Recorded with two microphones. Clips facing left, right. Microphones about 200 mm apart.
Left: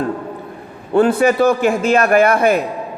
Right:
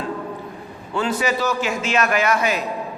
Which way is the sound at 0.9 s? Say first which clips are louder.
Left 9 dB; 55° left (ahead or behind).